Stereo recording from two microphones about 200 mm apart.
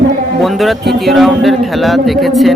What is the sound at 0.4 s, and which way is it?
A man's voice, centre (ahead or behind).